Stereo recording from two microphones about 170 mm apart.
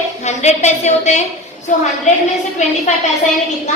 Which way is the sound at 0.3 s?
40° left (ahead or behind).